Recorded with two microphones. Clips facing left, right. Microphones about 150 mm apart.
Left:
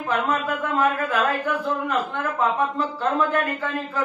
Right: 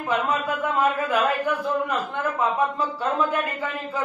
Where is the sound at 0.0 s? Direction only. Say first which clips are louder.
Left 1 dB; 10° right (ahead or behind).